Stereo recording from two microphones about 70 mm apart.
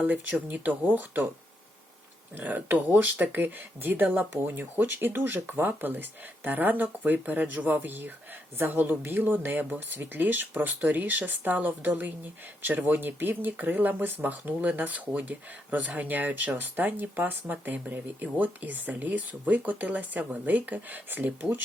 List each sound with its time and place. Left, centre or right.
0.0 s speech: right
2.3 s speech: right